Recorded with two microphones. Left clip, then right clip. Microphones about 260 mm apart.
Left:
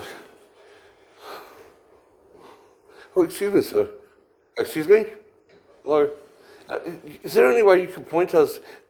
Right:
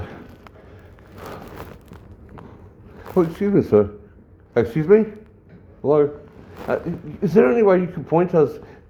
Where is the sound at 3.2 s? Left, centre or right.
Left.